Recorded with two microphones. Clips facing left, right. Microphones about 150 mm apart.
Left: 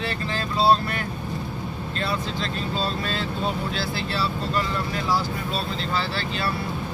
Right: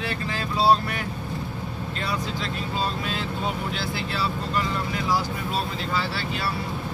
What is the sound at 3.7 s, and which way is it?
Speech, 15° right (ahead or behind).